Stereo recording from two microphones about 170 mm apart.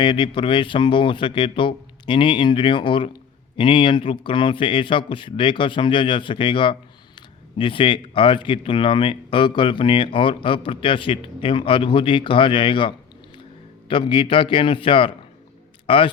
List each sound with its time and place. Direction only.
0.0 s a man's voice: 30° left (ahead or behind)